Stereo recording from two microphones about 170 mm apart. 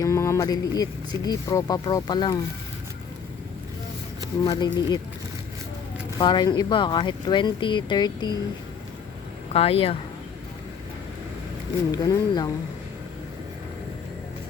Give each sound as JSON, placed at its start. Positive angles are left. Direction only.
{"t": 0.0, "sound": "speech", "side_deg": 15}
{"t": 4.4, "sound": "speech", "side_deg": 25}
{"t": 6.1, "sound": "speech", "side_deg": 25}
{"t": 9.5, "sound": "speech", "side_deg": 35}
{"t": 11.9, "sound": "speech", "side_deg": 25}